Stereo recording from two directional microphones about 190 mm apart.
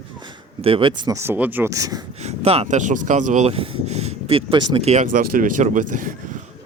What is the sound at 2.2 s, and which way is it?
Speech, 35° right (ahead or behind).